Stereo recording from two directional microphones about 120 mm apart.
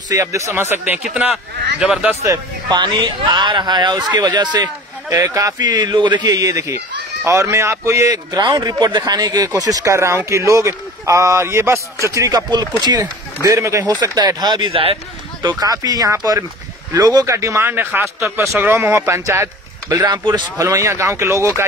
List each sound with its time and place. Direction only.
0.1 s speech: 25° right (ahead or behind)
0.8 s a man's voice: 10° right (ahead or behind)
2.2 s speech: 40° right (ahead or behind)
13.4 s speech: 25° right (ahead or behind)
14.0 s speech: 35° right (ahead or behind)
15.6 s speech: 30° right (ahead or behind)
20.1 s speech: 35° right (ahead or behind)